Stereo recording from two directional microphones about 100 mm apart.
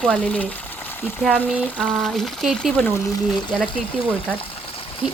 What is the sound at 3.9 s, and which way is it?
Speech, 10° left (ahead or behind).